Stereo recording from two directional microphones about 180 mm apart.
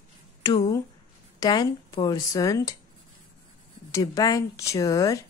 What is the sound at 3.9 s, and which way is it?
Speech, 20° left (ahead or behind).